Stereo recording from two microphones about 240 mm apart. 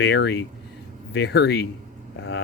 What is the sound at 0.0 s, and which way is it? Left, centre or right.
Speech, left.